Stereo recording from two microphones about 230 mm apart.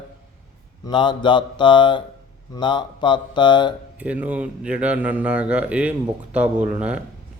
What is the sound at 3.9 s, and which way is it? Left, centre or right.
Speech, centre.